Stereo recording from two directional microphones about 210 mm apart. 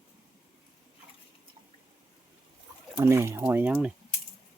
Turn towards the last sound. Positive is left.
turn(degrees=-5)  # may be behind; listen again after turning